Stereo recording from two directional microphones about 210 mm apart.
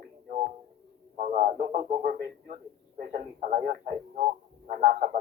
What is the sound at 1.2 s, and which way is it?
Radio, 35° right (ahead or behind).